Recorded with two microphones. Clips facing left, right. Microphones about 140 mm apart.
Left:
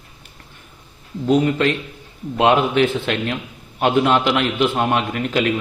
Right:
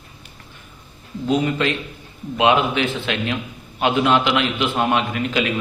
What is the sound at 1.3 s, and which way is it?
A man's voice, 45° left (ahead or behind).